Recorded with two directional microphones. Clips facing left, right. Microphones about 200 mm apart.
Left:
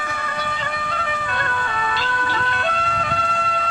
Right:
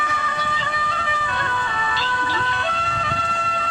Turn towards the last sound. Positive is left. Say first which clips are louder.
# left 3 dB
turn(degrees=55)  # may be behind; listen again after turning